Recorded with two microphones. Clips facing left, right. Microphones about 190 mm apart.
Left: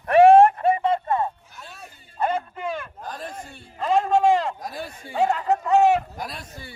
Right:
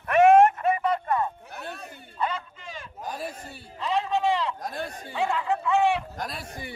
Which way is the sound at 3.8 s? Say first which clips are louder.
Left 6 dB; 50° left (ahead or behind).